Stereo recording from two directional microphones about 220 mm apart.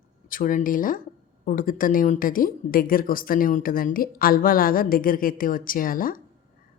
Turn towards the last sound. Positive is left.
turn(degrees=40)  # may be behind; listen again after turning